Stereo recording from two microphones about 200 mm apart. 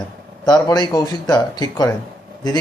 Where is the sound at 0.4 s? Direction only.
20° left (ahead or behind).